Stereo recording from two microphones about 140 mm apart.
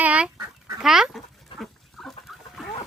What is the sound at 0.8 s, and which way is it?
Speech, 5° right (ahead or behind).